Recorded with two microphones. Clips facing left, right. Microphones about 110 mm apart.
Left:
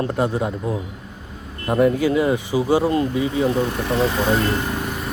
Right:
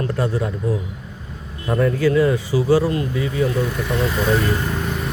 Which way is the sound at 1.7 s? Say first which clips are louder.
Even; 20° left (ahead or behind).